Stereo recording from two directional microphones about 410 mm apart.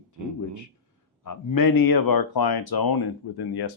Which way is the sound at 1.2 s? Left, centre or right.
Left.